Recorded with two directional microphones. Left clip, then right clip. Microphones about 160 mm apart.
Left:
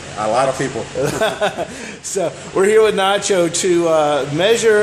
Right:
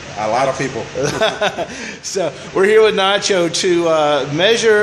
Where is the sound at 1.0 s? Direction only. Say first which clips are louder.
Right 1 dB; 15° right (ahead or behind).